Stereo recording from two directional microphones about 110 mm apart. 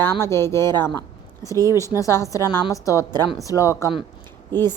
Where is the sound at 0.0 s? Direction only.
25° left (ahead or behind).